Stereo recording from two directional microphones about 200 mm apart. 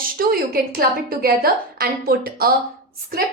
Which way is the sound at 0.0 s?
45° right (ahead or behind).